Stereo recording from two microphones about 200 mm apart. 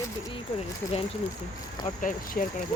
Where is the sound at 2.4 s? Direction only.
45° left (ahead or behind).